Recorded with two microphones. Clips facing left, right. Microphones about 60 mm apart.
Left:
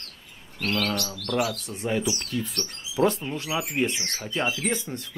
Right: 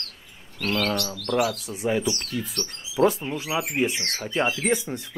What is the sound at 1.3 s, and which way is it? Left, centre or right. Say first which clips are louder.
Speech: right 3 dB; centre.